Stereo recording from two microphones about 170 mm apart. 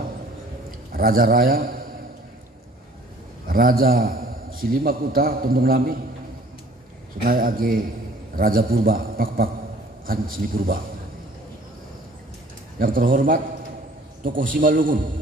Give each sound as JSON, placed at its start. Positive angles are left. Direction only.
{"t": 0.9, "sound": "a man's voice", "side_deg": -60}
{"t": 3.4, "sound": "a man's voice", "side_deg": -60}
{"t": 7.2, "sound": "a man's voice", "side_deg": -55}
{"t": 12.7, "sound": "a man's voice", "side_deg": -55}